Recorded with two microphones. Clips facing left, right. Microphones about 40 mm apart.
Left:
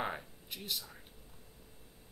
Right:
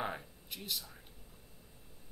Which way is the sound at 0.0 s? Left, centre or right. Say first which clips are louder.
Left 1 dB; centre.